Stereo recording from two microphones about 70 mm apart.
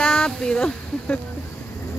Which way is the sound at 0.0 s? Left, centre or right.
Centre.